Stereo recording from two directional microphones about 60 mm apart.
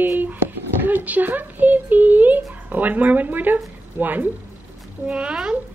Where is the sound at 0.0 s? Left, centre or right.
Right.